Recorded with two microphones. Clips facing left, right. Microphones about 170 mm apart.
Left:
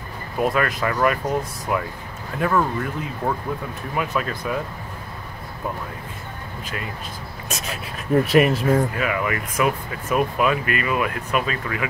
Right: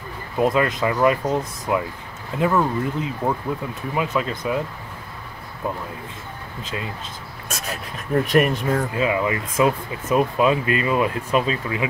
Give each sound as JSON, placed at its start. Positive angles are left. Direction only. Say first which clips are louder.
{"t": 0.4, "sound": "speech", "louder": "right 2 dB", "side_deg": -20}
{"t": 8.1, "sound": "speech", "louder": "left 2 dB", "side_deg": 5}
{"t": 8.9, "sound": "speech", "louder": "right 3 dB", "side_deg": -20}